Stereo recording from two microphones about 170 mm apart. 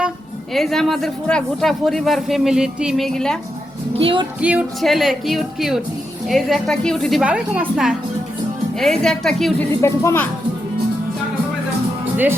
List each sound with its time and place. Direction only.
0.5 s a man's voice: centre (ahead or behind)
3.9 s music: 30° right (ahead or behind)
4.4 s a man's voice: 5° right (ahead or behind)
9.8 s speech: 15° left (ahead or behind)